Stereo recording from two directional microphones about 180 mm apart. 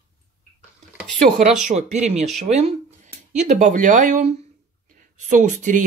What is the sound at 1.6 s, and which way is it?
Speech, 40° right (ahead or behind).